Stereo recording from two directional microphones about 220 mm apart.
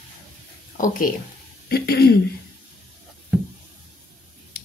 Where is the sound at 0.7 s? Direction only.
35° left (ahead or behind).